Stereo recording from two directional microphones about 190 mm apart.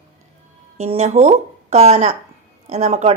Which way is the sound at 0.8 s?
35° right (ahead or behind).